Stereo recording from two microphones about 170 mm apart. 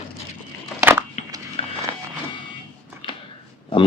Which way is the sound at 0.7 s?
15° right (ahead or behind).